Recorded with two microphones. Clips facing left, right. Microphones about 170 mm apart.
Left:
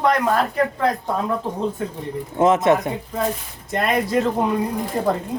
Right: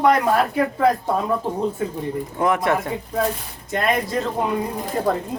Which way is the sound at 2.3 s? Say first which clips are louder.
Left 5 dB; 20° left (ahead or behind).